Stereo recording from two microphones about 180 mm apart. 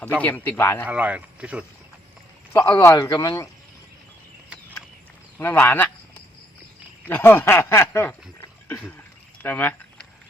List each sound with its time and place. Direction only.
0.2 s speech: 10° left (ahead or behind)
0.9 s speech: 10° right (ahead or behind)
2.6 s a man's voice: 20° left (ahead or behind)
5.4 s speech: 10° left (ahead or behind)
7.1 s a sound: 15° left (ahead or behind)